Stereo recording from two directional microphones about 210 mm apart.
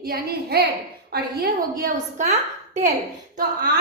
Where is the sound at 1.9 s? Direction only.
35° right (ahead or behind).